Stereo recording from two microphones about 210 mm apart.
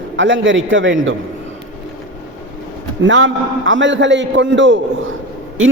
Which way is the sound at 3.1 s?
65° right (ahead or behind).